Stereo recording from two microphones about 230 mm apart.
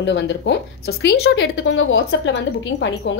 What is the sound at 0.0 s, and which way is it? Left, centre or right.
A woman's voice, left.